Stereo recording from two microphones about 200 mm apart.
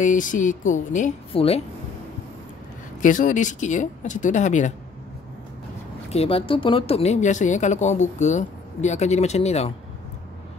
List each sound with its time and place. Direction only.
0.0 s speech: 40° left (ahead or behind)
3.0 s speech: 40° left (ahead or behind)
6.0 s speech: 30° left (ahead or behind)